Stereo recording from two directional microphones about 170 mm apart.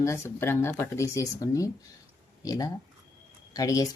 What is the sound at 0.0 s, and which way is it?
Speech, 15° left (ahead or behind).